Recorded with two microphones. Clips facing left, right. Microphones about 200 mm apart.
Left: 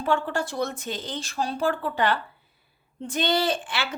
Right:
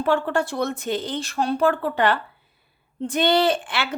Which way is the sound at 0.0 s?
60° right (ahead or behind).